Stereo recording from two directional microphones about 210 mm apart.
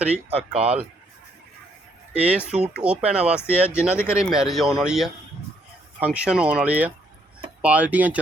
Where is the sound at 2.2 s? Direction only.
5° right (ahead or behind).